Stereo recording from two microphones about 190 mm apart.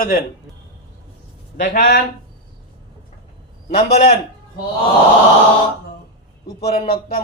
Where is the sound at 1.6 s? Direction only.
50° left (ahead or behind).